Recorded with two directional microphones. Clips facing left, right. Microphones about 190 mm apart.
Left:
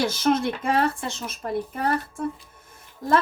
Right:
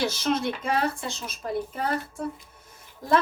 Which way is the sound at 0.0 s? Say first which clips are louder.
Left 4 dB; 55° left (ahead or behind).